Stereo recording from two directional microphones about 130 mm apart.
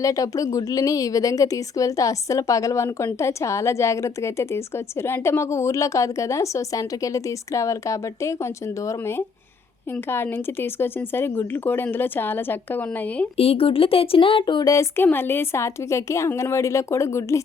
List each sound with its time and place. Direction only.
0.0 s speech: 25° left (ahead or behind)
13.3 s speech: 50° left (ahead or behind); by 17.4 s 20° left (ahead or behind)